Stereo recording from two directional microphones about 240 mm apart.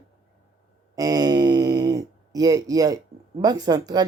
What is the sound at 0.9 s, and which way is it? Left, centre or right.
Speech, centre.